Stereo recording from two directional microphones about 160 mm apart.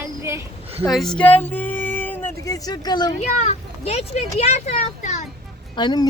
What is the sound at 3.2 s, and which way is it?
Speech, 40° left (ahead or behind).